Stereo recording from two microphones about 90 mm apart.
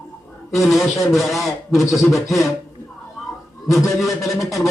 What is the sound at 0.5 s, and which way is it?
Speech, centre (ahead or behind).